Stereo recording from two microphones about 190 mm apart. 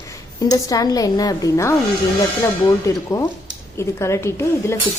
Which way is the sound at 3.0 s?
15° left (ahead or behind).